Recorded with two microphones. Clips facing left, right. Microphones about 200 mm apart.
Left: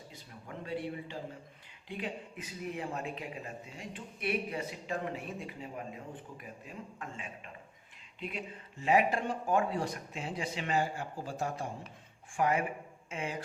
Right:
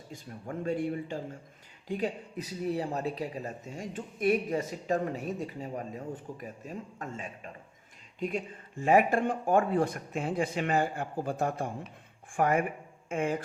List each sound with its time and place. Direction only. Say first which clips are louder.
0.1 s speech: right 11 dB; 45° right (ahead or behind)